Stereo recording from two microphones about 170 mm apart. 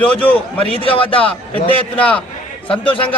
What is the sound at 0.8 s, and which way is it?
Speech, 30° left (ahead or behind).